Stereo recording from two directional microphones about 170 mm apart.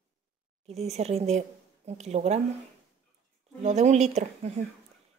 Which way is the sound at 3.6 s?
40° right (ahead or behind).